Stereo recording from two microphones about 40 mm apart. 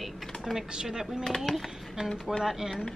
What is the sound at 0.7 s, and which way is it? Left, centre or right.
Speech, centre.